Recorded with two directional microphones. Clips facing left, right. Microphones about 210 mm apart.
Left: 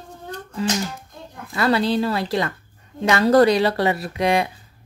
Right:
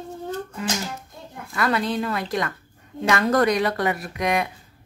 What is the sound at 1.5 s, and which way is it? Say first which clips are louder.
A woman's voice: left 4 dB; 30° left (ahead or behind).